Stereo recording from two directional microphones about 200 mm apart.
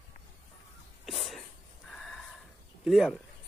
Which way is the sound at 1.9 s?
Centre (ahead or behind).